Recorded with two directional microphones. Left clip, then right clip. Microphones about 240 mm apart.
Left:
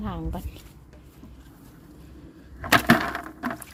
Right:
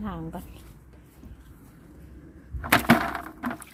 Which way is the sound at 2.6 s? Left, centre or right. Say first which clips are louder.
Left 2 dB; centre.